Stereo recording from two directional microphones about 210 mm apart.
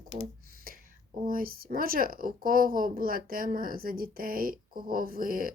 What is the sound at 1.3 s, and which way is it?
Speech, 45° right (ahead or behind).